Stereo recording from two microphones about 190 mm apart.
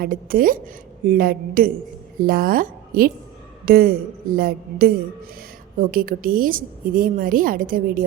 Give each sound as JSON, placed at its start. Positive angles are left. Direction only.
{"t": 0.0, "sound": "a woman's voice", "side_deg": -50}